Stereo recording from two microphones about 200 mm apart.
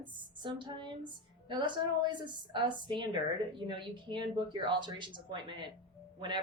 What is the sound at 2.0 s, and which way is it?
Speech, 25° right (ahead or behind).